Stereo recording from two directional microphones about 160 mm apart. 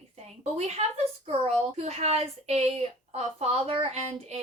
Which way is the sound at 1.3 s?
40° right (ahead or behind).